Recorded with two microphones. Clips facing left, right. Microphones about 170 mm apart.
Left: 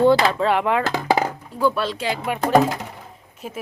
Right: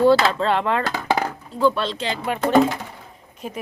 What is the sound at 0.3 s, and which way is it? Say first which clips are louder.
Speech: left 1 dB; 10° left (ahead or behind).